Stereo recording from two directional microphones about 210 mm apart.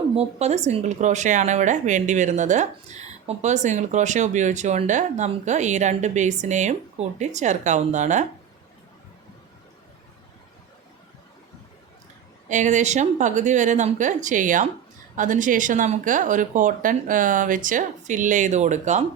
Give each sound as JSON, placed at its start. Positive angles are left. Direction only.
{"t": 0.2, "sound": "speech", "side_deg": -30}
{"t": 12.5, "sound": "speech", "side_deg": -35}